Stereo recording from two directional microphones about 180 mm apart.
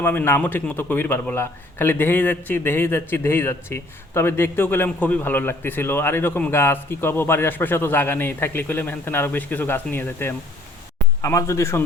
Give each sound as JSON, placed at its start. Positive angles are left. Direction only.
{"t": 0.0, "sound": "speech", "side_deg": 10}